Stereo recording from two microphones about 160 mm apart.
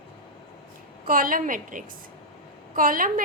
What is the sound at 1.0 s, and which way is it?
A woman's voice, 60° right (ahead or behind).